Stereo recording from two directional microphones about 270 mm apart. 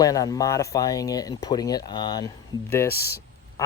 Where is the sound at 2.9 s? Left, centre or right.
Left.